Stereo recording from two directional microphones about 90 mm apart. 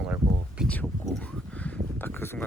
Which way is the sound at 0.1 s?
10° right (ahead or behind).